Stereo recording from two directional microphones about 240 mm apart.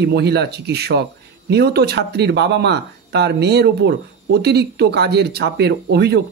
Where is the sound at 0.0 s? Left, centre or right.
Right.